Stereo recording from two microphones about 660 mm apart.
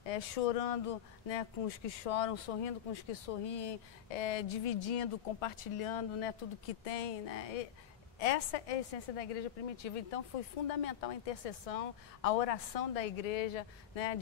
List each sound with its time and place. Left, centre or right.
0.0 s a woman's voice: left
6.8 s a woman's voice: left